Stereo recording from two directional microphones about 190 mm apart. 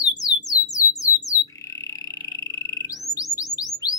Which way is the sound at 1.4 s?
15° left (ahead or behind).